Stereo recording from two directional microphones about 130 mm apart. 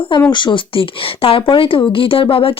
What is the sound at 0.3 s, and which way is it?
A woman's voice, 40° left (ahead or behind).